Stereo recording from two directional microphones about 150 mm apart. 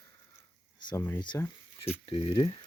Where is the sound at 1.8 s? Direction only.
35° left (ahead or behind).